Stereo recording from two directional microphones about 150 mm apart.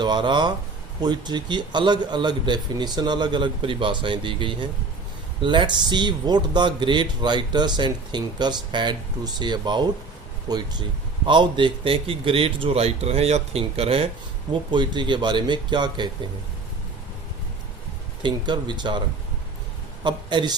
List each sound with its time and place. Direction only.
0.0 s a man's voice: 30° right (ahead or behind)
18.2 s speech: 30° right (ahead or behind)
20.1 s speech: 30° right (ahead or behind)